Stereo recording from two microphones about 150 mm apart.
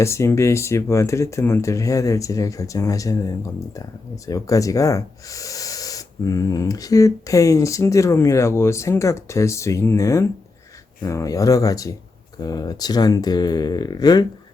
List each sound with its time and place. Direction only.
0.0 s speech: 20° left (ahead or behind)